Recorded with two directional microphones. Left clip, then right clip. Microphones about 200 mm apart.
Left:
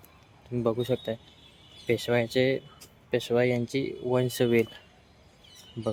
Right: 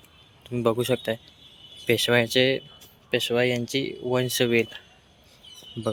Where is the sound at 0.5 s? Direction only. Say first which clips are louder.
Right 4 dB; centre (ahead or behind).